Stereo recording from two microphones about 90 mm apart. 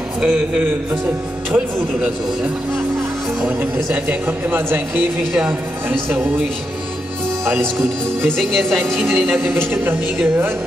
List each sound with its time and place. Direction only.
0.2 s speech: 10° right (ahead or behind)
3.4 s speech: 20° right (ahead or behind)
8.3 s speech: centre (ahead or behind)
9.0 s speech: 25° right (ahead or behind)